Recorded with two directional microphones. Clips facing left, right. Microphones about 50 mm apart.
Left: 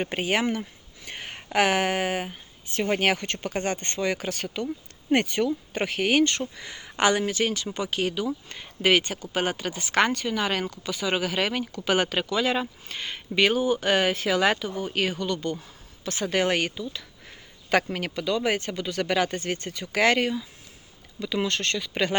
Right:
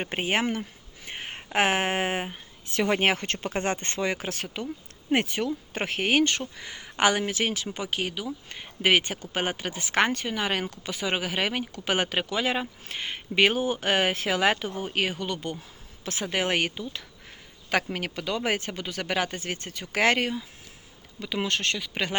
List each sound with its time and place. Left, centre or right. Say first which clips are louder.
0.0 s speech: left 1 dB; right
1.0 s a sound: even; centre
1.5 s speech: left 2 dB; right
5.7 s speech: left 1 dB; right
6.4 s speech: left 3 dB; centre
17.7 s speech: left 3 dB; centre
17.9 s speech: left 3 dB; centre